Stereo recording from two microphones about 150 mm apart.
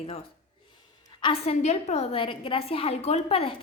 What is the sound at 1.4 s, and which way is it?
A woman's voice, 45° left (ahead or behind).